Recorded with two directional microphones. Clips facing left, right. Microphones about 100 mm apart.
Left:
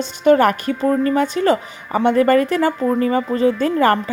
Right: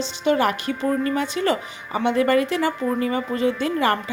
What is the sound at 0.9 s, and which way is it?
A woman's voice, 40° left (ahead or behind).